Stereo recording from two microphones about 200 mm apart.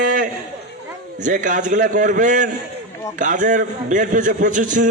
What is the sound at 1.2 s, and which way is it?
A man's voice, 40° right (ahead or behind).